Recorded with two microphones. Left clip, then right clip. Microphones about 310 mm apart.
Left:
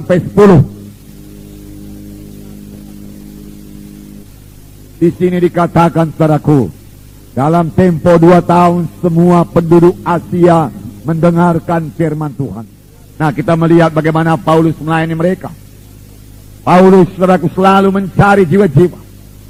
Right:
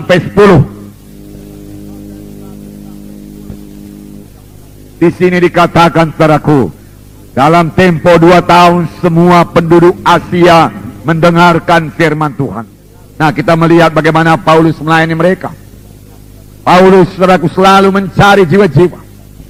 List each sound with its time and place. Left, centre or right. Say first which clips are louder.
0.1 s a man's voice: right 2 dB; right
4.9 s a man's voice: right 4 dB; right
16.6 s a man's voice: right 2 dB; right